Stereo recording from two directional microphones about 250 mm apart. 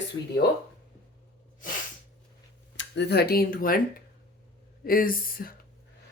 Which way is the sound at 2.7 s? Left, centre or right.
Left.